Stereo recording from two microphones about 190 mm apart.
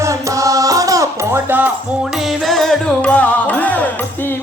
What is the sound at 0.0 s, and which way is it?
Music, 15° right (ahead or behind).